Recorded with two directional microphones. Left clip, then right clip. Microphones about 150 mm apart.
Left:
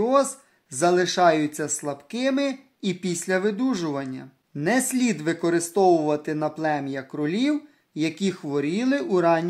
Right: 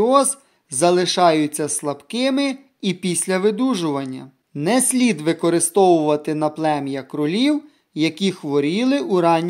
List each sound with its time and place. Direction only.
0.0 s speech: 25° right (ahead or behind)